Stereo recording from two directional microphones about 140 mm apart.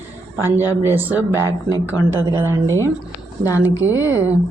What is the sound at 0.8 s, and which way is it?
Speech, 15° right (ahead or behind).